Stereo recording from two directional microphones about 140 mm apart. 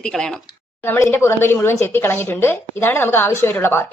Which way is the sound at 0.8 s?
15° left (ahead or behind).